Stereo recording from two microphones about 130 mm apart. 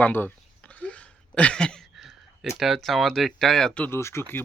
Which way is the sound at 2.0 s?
5° right (ahead or behind).